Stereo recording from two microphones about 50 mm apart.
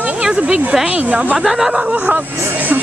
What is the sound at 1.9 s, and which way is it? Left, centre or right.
Speech, right.